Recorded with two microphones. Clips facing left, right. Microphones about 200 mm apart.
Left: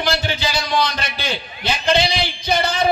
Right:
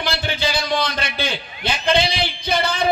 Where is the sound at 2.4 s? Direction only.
55° right (ahead or behind).